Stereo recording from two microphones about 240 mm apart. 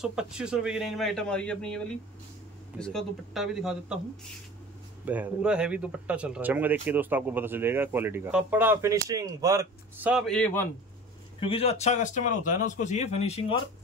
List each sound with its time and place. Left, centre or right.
0.0 s speech: centre
5.0 s speech: centre
10.1 s speech: centre
11.3 s a man's voice: left